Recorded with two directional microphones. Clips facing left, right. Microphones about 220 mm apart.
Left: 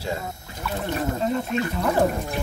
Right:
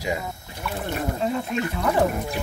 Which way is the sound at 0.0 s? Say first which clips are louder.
Right 2 dB; 15° right (ahead or behind).